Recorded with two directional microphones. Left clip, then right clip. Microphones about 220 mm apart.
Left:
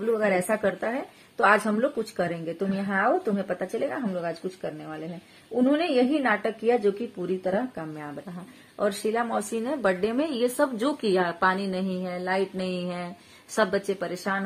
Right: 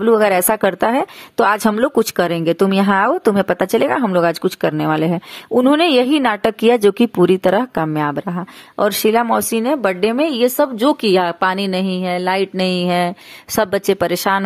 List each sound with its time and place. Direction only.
0.1 s a woman's voice: 40° right (ahead or behind)